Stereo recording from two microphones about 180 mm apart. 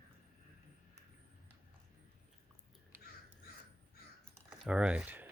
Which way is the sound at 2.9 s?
10° right (ahead or behind).